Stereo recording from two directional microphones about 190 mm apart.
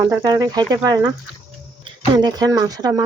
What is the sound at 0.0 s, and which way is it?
Speech, 15° right (ahead or behind).